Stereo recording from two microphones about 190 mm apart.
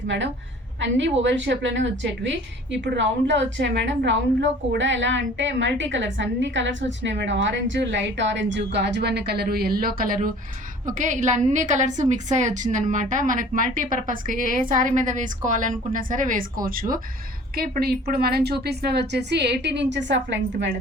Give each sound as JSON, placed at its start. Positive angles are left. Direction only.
{"t": 0.8, "sound": "a woman's voice", "side_deg": -75}